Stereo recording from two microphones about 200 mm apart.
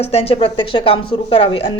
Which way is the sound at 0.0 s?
30° left (ahead or behind).